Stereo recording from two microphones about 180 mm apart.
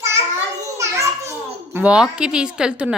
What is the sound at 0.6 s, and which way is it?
Children playing, 15° right (ahead or behind).